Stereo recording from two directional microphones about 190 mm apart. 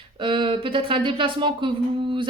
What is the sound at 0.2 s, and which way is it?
Speech, 25° right (ahead or behind).